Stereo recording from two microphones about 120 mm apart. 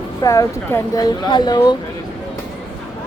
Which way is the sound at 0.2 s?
25° left (ahead or behind).